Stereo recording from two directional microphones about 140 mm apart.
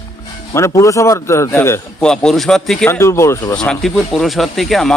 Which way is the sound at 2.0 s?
5° left (ahead or behind).